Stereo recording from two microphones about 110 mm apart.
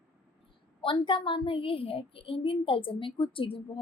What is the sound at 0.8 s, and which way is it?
A woman's voice, 50° left (ahead or behind).